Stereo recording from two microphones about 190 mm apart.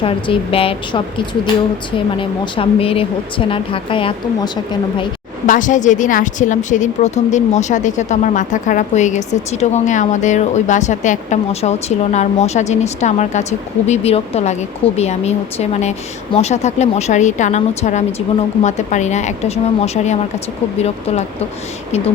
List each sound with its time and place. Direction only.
0.0 s speech: 30° left (ahead or behind)
5.5 s a woman's voice: 40° left (ahead or behind)